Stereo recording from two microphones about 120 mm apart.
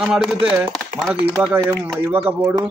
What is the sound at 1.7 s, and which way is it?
Speech, 15° right (ahead or behind).